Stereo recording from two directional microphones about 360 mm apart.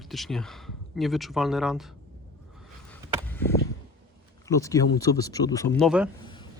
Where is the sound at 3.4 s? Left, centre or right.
Centre.